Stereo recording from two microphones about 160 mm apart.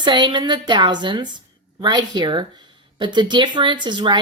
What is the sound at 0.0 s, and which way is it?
A woman's voice, 30° right (ahead or behind).